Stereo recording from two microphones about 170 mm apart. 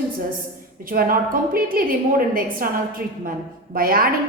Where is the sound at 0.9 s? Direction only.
55° right (ahead or behind).